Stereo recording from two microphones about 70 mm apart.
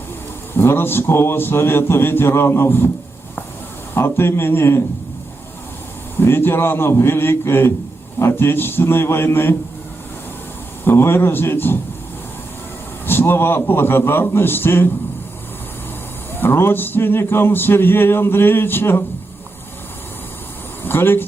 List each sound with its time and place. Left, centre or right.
0.5 s speech: left
3.9 s speech: left
6.1 s speech: left
10.8 s speech: left
13.1 s speech: left
16.3 s speech: left
20.8 s speech: left